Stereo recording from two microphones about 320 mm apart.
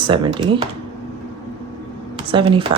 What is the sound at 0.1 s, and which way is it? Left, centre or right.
Speech, centre.